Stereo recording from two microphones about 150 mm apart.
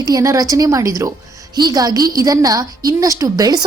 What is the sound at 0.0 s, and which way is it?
A woman's voice, 25° right (ahead or behind).